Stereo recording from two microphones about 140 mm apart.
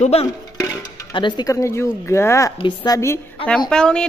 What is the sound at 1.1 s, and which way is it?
Speech, 35° left (ahead or behind).